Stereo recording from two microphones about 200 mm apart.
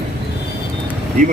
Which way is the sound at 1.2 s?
40° right (ahead or behind).